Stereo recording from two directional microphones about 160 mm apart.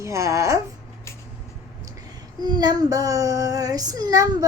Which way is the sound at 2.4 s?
25° right (ahead or behind).